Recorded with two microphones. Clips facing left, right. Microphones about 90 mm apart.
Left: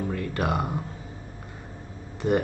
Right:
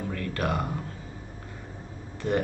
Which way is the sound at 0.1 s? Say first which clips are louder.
Right 1 dB; 20° left (ahead or behind).